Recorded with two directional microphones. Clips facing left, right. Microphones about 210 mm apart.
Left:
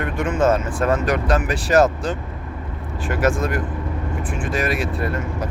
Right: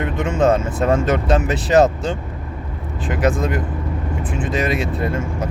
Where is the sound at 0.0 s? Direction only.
20° right (ahead or behind).